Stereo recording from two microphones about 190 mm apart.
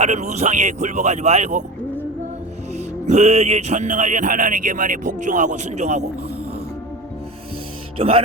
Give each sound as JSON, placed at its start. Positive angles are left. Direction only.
{"t": 0.0, "sound": "speech", "side_deg": -35}
{"t": 2.7, "sound": "speech", "side_deg": -35}
{"t": 7.9, "sound": "speech", "side_deg": -30}